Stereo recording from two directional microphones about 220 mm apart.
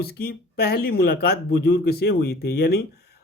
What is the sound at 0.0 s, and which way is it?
Speech, 45° left (ahead or behind).